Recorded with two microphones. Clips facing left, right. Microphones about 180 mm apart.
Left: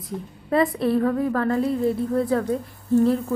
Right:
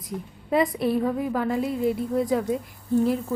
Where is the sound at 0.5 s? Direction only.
15° right (ahead or behind).